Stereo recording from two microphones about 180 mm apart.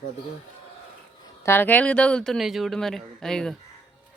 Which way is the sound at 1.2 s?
15° left (ahead or behind).